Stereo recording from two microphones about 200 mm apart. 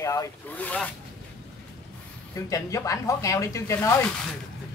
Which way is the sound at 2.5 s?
15° left (ahead or behind).